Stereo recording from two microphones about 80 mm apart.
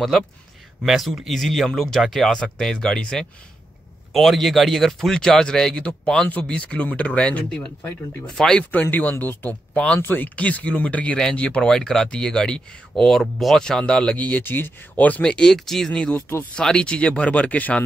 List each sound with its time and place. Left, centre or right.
0.8 s speech: centre
9.1 s speech: left
16.2 s speech: left
16.5 s speech: centre